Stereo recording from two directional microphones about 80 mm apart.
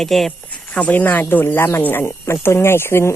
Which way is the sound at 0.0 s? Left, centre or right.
Centre.